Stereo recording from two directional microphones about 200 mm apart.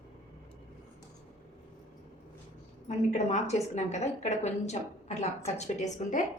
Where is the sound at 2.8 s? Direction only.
35° left (ahead or behind).